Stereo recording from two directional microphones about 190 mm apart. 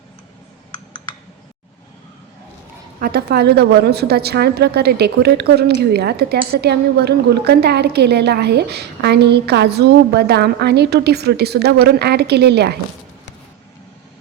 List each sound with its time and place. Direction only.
3.0 s a woman's voice: 55° right (ahead or behind)